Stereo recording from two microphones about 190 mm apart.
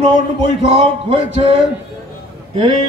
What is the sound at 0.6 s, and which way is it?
Speech, 30° right (ahead or behind).